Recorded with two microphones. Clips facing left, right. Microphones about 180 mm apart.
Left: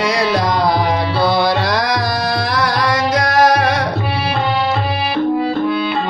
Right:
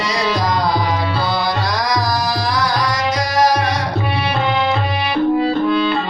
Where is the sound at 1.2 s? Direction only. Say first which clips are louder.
Left 5 dB; 65° left (ahead or behind).